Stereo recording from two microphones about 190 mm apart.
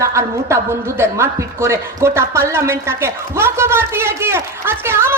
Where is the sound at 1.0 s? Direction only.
15° right (ahead or behind).